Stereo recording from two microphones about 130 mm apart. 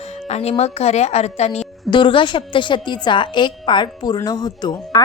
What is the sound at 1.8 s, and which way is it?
A woman's voice, 40° left (ahead or behind).